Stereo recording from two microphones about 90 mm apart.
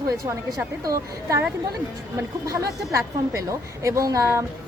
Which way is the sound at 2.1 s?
35° right (ahead or behind).